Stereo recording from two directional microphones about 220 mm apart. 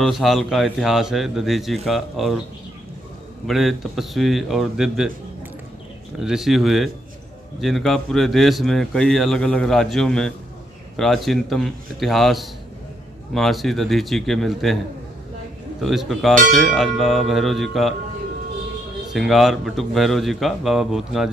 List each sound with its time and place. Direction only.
0.0 s speech: centre (ahead or behind)
3.4 s speech: centre (ahead or behind)
6.1 s speech: centre (ahead or behind)
15.8 s speech: centre (ahead or behind)
19.1 s speech: centre (ahead or behind)